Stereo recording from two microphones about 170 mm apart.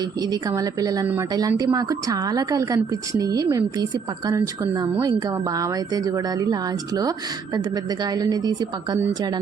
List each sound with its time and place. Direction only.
0.2 s a woman's voice: 20° right (ahead or behind)